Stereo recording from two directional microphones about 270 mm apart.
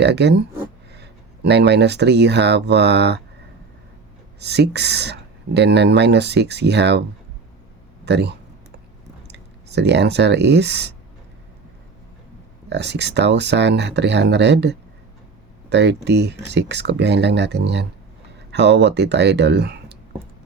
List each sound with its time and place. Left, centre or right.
0.0 s speech: right
4.4 s speech: right
8.0 s speech: right
12.6 s speech: right